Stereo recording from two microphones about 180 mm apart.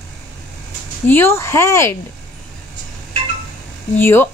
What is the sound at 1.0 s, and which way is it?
Speech, 10° left (ahead or behind).